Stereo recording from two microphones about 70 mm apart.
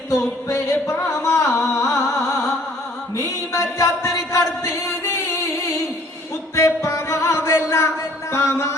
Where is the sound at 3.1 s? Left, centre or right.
Left.